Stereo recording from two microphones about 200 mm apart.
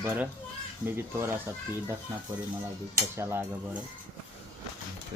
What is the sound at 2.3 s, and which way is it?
Speech, 20° right (ahead or behind).